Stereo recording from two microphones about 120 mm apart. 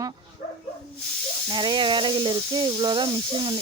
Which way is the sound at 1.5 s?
40° right (ahead or behind).